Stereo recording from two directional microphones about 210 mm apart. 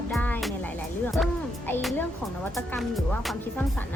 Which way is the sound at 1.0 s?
Centre (ahead or behind).